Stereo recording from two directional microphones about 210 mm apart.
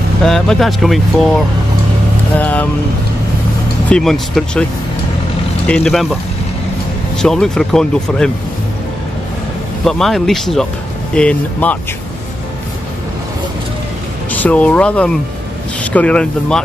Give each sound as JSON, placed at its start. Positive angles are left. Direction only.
{"t": 0.2, "sound": "speech", "side_deg": 0}
{"t": 2.3, "sound": "speech", "side_deg": 10}
{"t": 3.9, "sound": "speech", "side_deg": 0}
{"t": 5.7, "sound": "speech", "side_deg": 0}
{"t": 7.2, "sound": "speech", "side_deg": 5}
{"t": 9.8, "sound": "speech", "side_deg": 0}
{"t": 14.3, "sound": "speech", "side_deg": 5}